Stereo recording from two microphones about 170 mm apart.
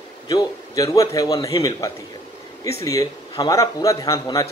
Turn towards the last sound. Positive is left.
turn(degrees=20)  # may be behind; listen again after turning